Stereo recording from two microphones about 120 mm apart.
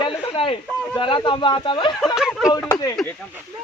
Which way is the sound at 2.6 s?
30° left (ahead or behind).